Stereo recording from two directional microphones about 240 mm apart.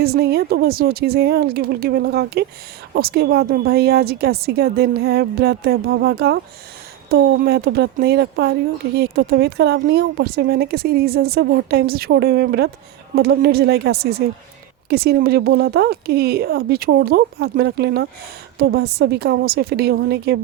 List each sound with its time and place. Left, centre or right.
0.0 s speech: right